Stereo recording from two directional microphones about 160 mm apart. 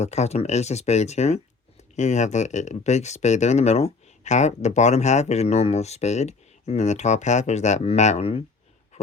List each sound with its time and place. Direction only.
0.0 s speech: 45° left (ahead or behind)